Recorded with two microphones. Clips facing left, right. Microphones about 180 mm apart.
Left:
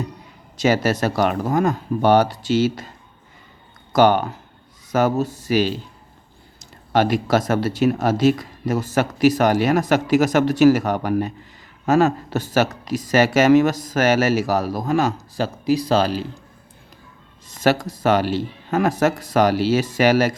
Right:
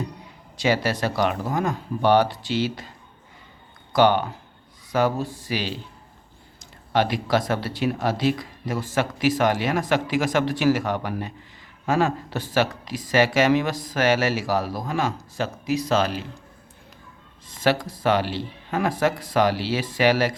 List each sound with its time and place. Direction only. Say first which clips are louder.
0.5 s speech: left 4 dB; 45° left (ahead or behind)
3.9 s speech: left 3 dB; 45° left (ahead or behind)
17.5 s speech: left 3 dB; 45° left (ahead or behind)